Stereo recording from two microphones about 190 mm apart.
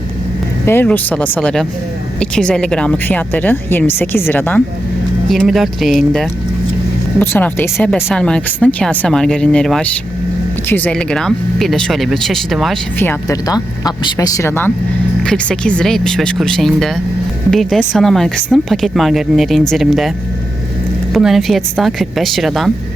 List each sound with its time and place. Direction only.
0.6 s speech: 10° left (ahead or behind)
13.0 s speech: 15° left (ahead or behind)
21.1 s speech: centre (ahead or behind)